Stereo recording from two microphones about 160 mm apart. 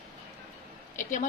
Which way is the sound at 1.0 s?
55° left (ahead or behind).